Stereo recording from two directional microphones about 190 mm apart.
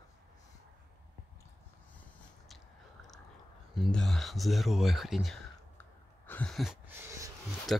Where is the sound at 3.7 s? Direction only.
Centre (ahead or behind).